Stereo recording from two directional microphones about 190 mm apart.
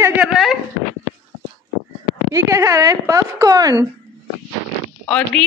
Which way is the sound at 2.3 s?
15° right (ahead or behind).